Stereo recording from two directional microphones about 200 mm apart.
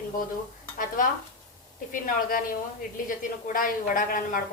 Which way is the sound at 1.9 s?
45° left (ahead or behind).